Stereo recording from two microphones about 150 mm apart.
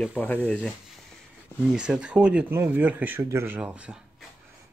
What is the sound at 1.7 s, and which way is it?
Speech, 5° right (ahead or behind).